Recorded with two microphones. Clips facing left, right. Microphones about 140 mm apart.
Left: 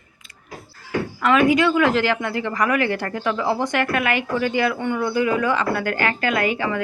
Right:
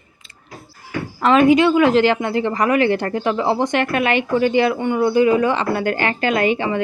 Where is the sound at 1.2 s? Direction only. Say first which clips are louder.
Right 4 dB; 25° right (ahead or behind).